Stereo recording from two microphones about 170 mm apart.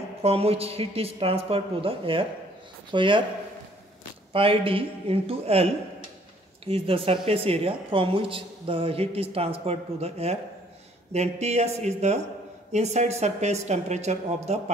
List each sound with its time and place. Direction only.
0.2 s speech: 35° right (ahead or behind)
4.3 s speech: 30° right (ahead or behind)